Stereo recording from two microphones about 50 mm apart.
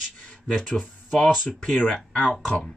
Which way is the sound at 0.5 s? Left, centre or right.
Centre.